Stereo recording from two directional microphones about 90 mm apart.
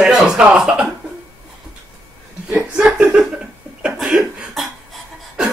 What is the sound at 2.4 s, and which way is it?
Chuckle, 15° right (ahead or behind).